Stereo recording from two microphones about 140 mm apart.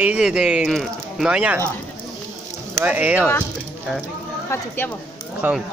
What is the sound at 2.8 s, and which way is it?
Speech, 10° right (ahead or behind).